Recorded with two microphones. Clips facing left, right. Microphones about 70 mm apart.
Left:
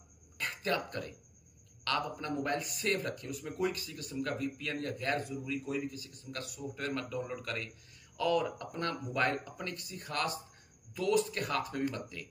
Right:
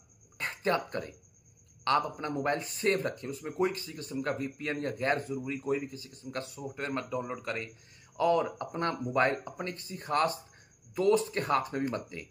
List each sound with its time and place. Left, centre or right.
0.4 s a man's voice: right